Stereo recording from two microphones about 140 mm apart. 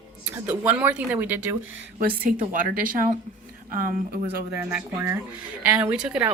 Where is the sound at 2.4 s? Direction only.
70° right (ahead or behind).